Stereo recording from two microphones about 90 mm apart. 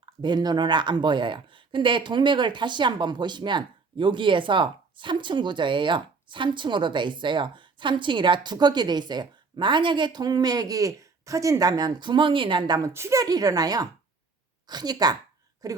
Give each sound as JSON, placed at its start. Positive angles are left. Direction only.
{"t": 0.0, "sound": "speech", "side_deg": -55}
{"t": 11.8, "sound": "speech", "side_deg": -55}
{"t": 12.8, "sound": "a woman's voice", "side_deg": -35}